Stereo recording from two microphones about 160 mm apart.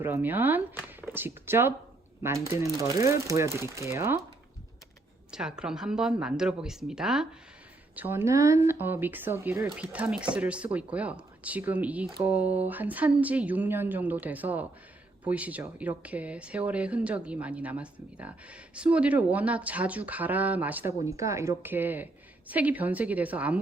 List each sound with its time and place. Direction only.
0.0 s speech: 15° right (ahead or behind)
5.3 s speech: 5° right (ahead or behind)